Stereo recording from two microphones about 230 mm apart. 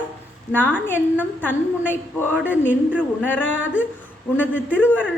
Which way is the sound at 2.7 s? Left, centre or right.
Centre.